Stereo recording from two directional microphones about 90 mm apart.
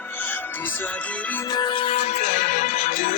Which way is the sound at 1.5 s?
50° left (ahead or behind).